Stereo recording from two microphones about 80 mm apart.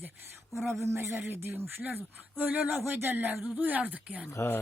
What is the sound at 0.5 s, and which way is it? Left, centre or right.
Speech, right.